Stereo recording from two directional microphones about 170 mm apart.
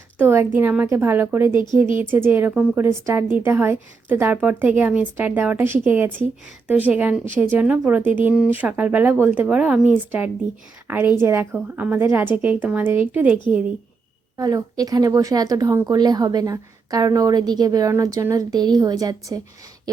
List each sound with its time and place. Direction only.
0.2 s speech: 10° right (ahead or behind)
14.3 s a woman's voice: 20° right (ahead or behind)